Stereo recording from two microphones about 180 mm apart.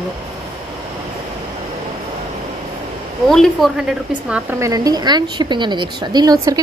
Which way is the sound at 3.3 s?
Centre (ahead or behind).